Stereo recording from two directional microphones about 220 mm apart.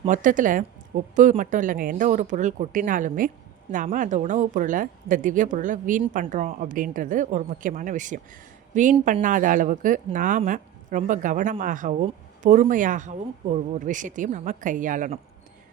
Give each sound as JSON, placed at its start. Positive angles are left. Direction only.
{"t": 0.0, "sound": "speech", "side_deg": -35}